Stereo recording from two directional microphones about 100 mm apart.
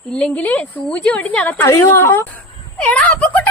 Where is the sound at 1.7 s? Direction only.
25° left (ahead or behind).